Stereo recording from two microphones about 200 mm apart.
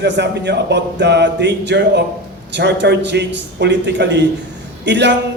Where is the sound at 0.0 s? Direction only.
60° right (ahead or behind).